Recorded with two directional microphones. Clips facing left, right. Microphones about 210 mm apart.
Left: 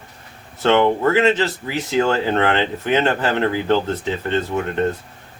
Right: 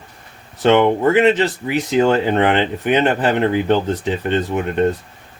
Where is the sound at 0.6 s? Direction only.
20° right (ahead or behind).